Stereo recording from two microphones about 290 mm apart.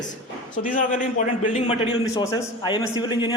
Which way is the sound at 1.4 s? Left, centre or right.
Left.